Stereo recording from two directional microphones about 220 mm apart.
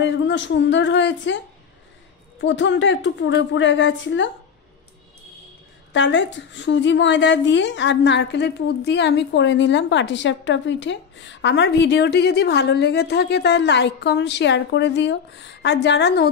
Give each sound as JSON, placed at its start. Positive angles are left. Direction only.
{"t": 0.0, "sound": "a woman's voice", "side_deg": 55}
{"t": 2.4, "sound": "a woman's voice", "side_deg": 55}
{"t": 5.9, "sound": "a woman's voice", "side_deg": 55}